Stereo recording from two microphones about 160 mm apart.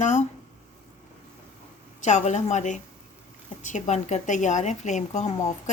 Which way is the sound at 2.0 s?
45° left (ahead or behind).